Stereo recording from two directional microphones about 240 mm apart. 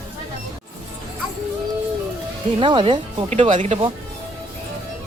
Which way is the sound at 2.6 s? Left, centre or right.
Right.